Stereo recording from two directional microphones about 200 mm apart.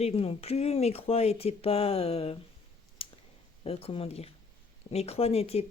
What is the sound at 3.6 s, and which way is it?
Speech, 30° left (ahead or behind).